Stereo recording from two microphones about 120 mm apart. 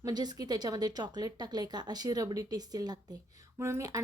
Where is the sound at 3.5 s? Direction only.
20° right (ahead or behind).